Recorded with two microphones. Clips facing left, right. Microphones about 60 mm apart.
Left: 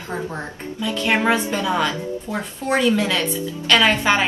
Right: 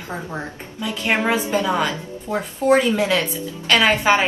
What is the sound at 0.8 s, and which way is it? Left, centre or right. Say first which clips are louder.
A woman's voice: left 1 dB; centre.